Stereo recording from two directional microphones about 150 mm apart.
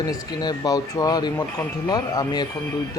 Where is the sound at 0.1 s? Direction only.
25° left (ahead or behind).